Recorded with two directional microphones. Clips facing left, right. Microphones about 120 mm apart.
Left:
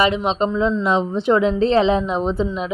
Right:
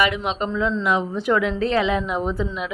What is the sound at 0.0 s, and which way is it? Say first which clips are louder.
A woman's voice: left 4 dB; 25° left (ahead or behind).